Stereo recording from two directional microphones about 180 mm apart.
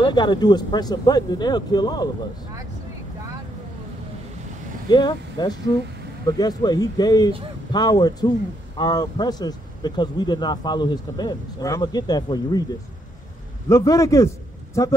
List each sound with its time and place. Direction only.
0.0 s speech: 25° left (ahead or behind)
4.8 s speech: 25° left (ahead or behind)
13.7 s a man's voice: 15° left (ahead or behind)